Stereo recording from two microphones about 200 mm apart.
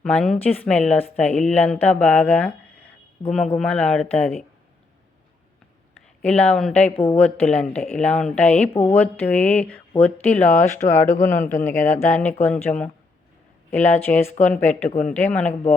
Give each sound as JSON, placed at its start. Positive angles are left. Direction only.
{"t": 0.0, "sound": "speech", "side_deg": 5}
{"t": 6.2, "sound": "speech", "side_deg": 5}
{"t": 6.9, "sound": "speech", "side_deg": 25}
{"t": 7.2, "sound": "speech", "side_deg": 5}
{"t": 8.7, "sound": "speech", "side_deg": 25}
{"t": 9.0, "sound": "speech", "side_deg": 10}
{"t": 10.5, "sound": "speech", "side_deg": 35}
{"t": 11.6, "sound": "speech", "side_deg": 15}
{"t": 14.1, "sound": "speech", "side_deg": 5}
{"t": 14.7, "sound": "speech", "side_deg": 35}
{"t": 15.3, "sound": "speech", "side_deg": 5}